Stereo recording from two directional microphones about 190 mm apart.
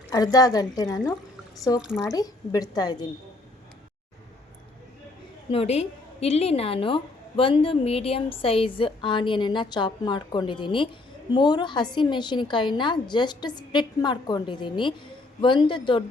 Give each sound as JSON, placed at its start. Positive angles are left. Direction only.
{"t": 0.1, "sound": "a woman's voice", "side_deg": 20}
{"t": 1.8, "sound": "speech", "side_deg": -5}
{"t": 2.1, "sound": "a woman's voice", "side_deg": 20}
{"t": 5.5, "sound": "a woman's voice", "side_deg": 30}